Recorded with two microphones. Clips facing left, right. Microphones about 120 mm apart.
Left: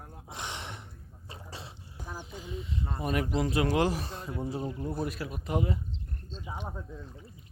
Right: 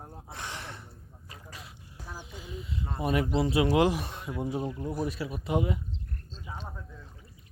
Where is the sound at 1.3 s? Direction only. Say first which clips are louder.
Left 3 dB; 30° left (ahead or behind).